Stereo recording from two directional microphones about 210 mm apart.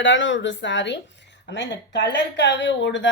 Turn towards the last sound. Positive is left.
turn(degrees=60)  # may be behind; listen again after turning